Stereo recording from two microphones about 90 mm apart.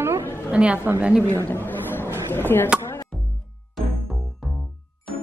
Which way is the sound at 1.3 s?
25° left (ahead or behind).